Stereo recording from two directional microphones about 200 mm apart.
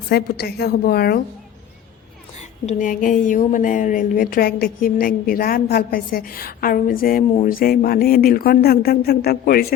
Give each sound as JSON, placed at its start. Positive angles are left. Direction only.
{"t": 0.1, "sound": "a woman's voice", "side_deg": 50}
{"t": 2.6, "sound": "a woman's voice", "side_deg": 40}